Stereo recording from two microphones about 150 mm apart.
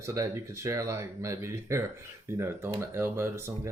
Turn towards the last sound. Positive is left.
turn(degrees=-15)  # may be behind; listen again after turning